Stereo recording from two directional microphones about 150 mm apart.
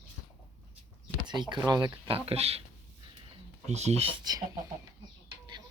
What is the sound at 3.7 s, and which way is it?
Speech, 45° right (ahead or behind).